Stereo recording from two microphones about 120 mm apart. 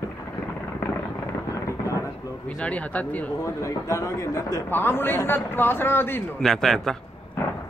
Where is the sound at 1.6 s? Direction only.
25° left (ahead or behind).